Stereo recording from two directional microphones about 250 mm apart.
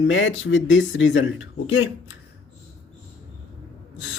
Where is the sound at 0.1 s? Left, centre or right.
Left.